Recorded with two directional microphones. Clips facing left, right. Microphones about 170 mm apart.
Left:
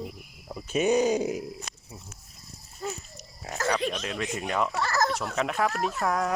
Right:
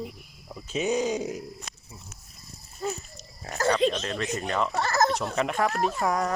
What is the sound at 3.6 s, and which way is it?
Pig, 25° right (ahead or behind).